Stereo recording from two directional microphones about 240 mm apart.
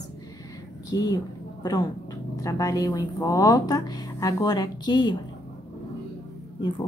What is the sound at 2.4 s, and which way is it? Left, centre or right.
Speech, centre.